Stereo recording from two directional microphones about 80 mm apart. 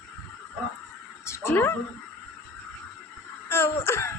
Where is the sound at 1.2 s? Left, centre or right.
Left.